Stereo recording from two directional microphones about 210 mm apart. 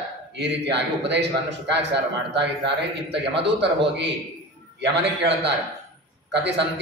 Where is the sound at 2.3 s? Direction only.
55° right (ahead or behind).